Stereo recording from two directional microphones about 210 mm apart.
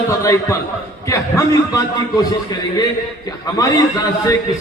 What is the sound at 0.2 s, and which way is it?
Speech, 15° left (ahead or behind).